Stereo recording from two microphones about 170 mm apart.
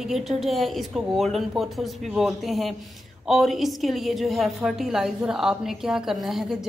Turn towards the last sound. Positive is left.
turn(degrees=0)  # may be behind; listen again after turning